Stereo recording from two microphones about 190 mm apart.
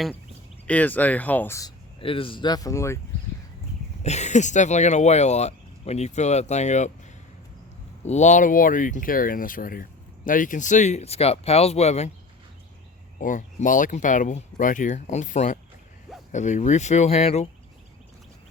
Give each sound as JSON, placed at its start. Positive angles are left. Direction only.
{"t": 0.7, "sound": "speech", "side_deg": 10}
{"t": 2.0, "sound": "speech", "side_deg": 30}
{"t": 4.0, "sound": "speech", "side_deg": 35}
{"t": 8.0, "sound": "speech", "side_deg": 40}
{"t": 13.1, "sound": "speech", "side_deg": 45}